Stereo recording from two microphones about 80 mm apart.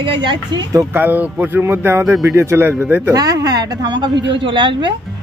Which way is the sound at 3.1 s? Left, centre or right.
Right.